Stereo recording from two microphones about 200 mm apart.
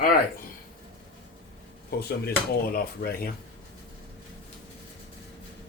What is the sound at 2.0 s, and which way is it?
A man's voice, 50° left (ahead or behind).